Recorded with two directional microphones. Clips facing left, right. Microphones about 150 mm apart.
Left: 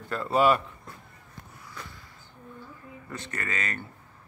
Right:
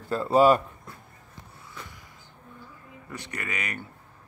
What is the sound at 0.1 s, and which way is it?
Speech, 35° right (ahead or behind).